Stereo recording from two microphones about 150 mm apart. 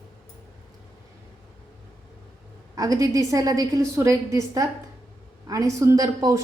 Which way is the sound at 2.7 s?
25° right (ahead or behind).